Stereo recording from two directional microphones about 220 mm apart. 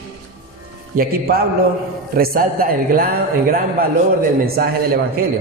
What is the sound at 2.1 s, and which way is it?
A man's voice, 40° right (ahead or behind).